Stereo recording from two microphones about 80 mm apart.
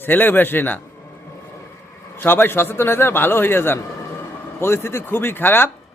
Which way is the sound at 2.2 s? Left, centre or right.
Left.